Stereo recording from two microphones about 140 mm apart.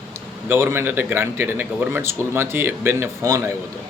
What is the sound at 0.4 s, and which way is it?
A man's voice, 15° right (ahead or behind).